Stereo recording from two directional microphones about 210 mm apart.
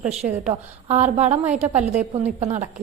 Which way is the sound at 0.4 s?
35° right (ahead or behind).